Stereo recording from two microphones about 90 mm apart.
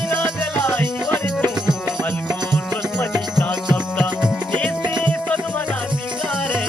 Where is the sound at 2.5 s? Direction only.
20° left (ahead or behind).